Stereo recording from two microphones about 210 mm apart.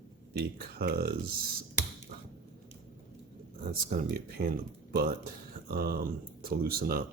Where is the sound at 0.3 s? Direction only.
50° right (ahead or behind).